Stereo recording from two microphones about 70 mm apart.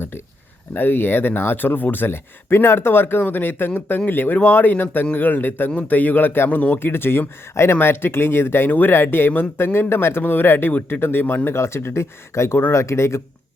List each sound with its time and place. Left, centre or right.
0.7 s speech: left